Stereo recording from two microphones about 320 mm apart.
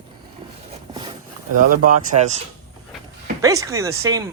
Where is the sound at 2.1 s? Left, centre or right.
Right.